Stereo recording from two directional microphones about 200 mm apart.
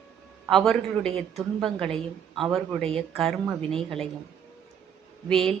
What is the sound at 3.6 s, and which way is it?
Speech, 30° right (ahead or behind).